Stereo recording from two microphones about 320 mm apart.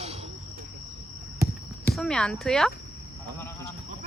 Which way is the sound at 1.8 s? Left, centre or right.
Centre.